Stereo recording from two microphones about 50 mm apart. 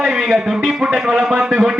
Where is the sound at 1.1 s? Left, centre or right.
Centre.